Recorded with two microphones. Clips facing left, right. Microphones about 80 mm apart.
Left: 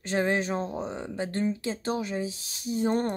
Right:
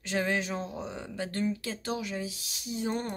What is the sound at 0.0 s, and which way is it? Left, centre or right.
Speech, left.